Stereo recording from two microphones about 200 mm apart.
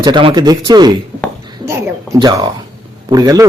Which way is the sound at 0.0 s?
25° right (ahead or behind).